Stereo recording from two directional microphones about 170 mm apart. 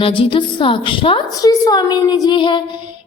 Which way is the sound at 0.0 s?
30° left (ahead or behind).